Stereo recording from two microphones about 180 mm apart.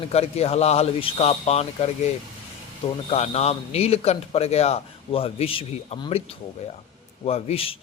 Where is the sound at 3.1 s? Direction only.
35° left (ahead or behind).